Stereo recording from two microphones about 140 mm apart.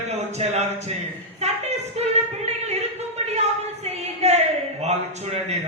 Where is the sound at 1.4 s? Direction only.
50° right (ahead or behind).